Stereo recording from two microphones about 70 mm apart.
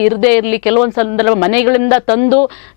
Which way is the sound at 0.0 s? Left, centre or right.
Centre.